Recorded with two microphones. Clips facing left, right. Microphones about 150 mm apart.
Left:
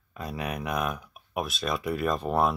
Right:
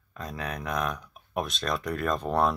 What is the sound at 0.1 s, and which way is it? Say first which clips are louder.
Speech: left 2 dB; 10° left (ahead or behind).